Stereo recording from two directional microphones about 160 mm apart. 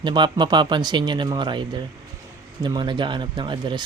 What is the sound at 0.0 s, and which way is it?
Speech, 30° right (ahead or behind).